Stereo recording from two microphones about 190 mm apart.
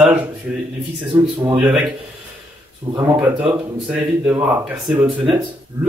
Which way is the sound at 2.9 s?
20° right (ahead or behind).